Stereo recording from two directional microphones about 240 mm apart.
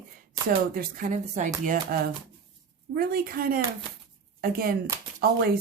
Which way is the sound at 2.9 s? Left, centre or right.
Right.